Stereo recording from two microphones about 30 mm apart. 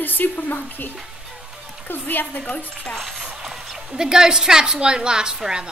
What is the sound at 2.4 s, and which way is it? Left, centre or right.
Speech, left.